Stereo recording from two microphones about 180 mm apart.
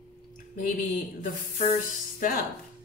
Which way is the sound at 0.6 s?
45° left (ahead or behind).